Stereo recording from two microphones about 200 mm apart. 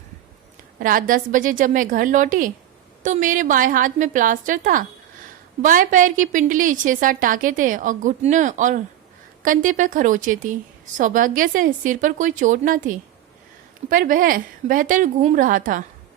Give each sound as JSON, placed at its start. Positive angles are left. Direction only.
{"t": 0.8, "sound": "a woman's voice", "side_deg": -45}